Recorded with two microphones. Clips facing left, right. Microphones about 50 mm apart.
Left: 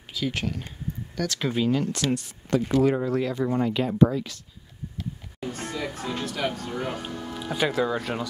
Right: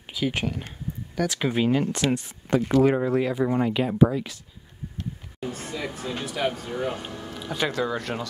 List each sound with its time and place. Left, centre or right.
0.1 s speech: centre
5.4 s speech: centre
7.2 s speech: centre